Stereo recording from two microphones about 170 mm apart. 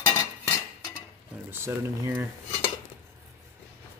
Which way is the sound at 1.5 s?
15° right (ahead or behind).